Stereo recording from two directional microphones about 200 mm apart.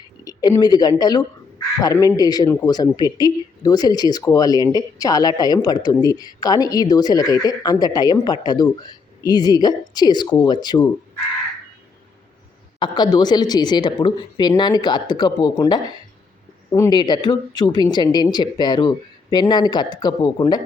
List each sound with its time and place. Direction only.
0.3 s speech: 20° left (ahead or behind)
12.8 s speech: 20° left (ahead or behind)